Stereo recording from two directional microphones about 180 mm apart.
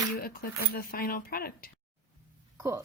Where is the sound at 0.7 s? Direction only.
55° left (ahead or behind).